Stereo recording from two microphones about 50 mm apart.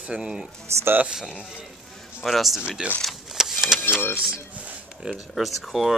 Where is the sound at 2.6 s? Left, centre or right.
Centre.